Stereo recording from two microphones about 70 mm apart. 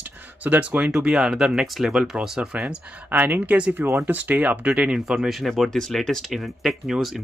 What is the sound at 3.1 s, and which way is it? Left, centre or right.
Speech, right.